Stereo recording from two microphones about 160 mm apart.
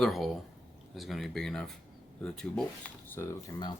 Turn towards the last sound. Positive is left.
turn(degrees=20)  # may be behind; listen again after turning